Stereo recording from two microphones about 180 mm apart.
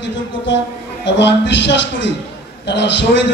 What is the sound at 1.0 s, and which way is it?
A man's voice, 75° left (ahead or behind).